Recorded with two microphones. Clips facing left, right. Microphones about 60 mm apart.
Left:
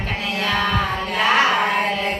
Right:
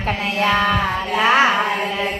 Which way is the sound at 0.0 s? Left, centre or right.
Right.